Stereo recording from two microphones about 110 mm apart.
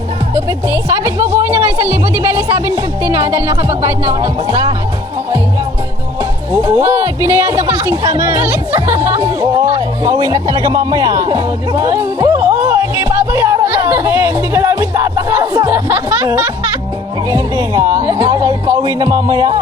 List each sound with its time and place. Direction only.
0.3 s a woman's voice: 25° right (ahead or behind)
6.5 s a woman's voice: 30° right (ahead or behind)
9.4 s speech: 35° right (ahead or behind)
17.2 s speech: 35° right (ahead or behind)